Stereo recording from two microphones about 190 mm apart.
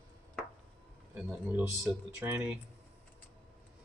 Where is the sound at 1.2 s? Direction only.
5° right (ahead or behind).